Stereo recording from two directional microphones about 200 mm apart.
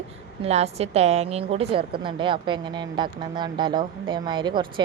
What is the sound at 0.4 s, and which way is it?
A woman's voice, 30° right (ahead or behind).